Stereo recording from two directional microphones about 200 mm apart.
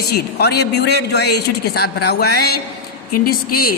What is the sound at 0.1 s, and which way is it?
A man's voice, 55° left (ahead or behind).